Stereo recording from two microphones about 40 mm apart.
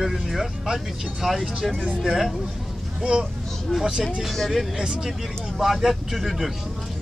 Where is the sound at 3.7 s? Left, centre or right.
Centre.